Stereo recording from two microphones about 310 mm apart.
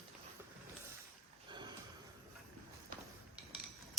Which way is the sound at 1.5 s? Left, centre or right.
Centre.